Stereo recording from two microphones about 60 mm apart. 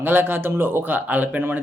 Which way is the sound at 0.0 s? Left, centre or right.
Right.